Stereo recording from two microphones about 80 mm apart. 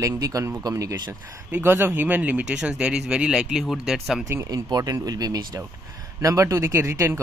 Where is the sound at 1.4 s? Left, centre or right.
Centre.